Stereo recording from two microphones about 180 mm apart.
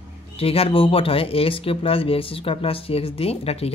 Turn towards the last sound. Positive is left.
turn(degrees=35)  # may be behind; listen again after turning